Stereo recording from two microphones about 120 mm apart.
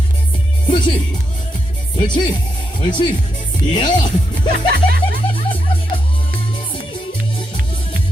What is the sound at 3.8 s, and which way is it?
Speech, 90° left.